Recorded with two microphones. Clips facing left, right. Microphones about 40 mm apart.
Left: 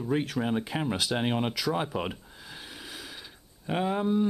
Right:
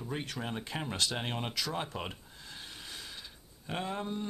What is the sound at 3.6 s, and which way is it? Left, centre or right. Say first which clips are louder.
Speech: left 9 dB; centre.